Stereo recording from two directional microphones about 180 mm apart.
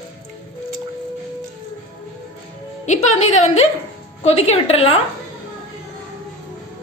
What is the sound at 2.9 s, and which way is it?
A woman's voice, 40° left (ahead or behind).